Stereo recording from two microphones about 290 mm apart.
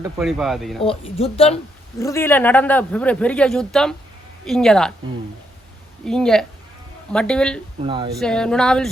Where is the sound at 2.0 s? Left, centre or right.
Centre.